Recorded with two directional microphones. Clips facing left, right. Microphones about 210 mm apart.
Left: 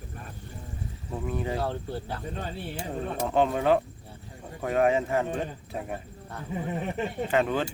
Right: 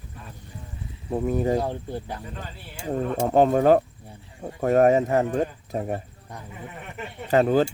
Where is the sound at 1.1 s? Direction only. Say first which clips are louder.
Right 8 dB; 45° right (ahead or behind).